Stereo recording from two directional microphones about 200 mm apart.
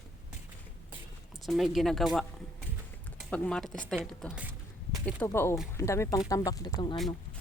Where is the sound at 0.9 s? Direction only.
Centre (ahead or behind).